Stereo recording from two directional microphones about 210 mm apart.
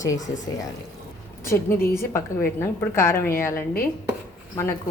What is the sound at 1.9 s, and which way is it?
A woman's voice, 10° left (ahead or behind).